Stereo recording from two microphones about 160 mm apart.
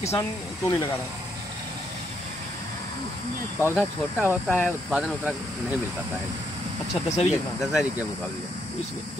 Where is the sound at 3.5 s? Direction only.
15° left (ahead or behind).